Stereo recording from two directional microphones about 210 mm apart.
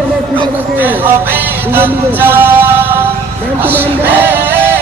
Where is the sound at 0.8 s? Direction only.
10° right (ahead or behind).